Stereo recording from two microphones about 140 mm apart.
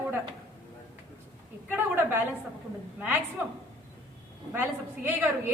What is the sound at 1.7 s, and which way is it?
A woman's voice, 15° right (ahead or behind).